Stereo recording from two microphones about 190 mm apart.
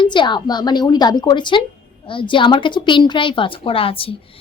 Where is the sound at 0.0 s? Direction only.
25° left (ahead or behind).